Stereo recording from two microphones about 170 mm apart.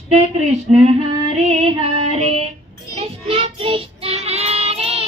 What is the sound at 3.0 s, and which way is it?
Child singing, 35° right (ahead or behind).